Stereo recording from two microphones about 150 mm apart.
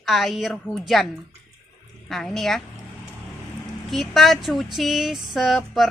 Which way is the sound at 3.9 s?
Centre (ahead or behind).